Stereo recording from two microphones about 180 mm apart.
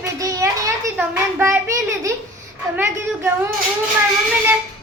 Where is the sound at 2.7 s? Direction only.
10° right (ahead or behind).